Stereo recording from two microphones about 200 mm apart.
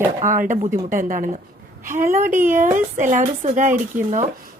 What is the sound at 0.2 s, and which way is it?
A woman's voice, 40° right (ahead or behind).